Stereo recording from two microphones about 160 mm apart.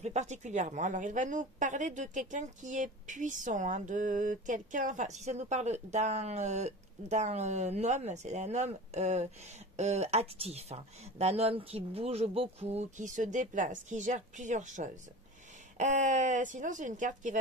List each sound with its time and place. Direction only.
0.0 s a woman's voice: 45° right (ahead or behind)